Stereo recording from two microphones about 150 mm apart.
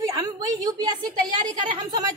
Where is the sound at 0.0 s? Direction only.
25° right (ahead or behind).